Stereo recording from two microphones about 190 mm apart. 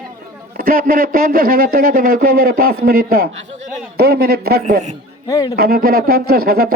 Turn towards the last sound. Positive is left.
turn(degrees=-50)  # may be behind; listen again after turning